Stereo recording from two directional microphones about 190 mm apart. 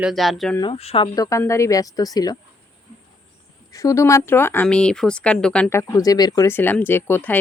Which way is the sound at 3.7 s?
15° left (ahead or behind).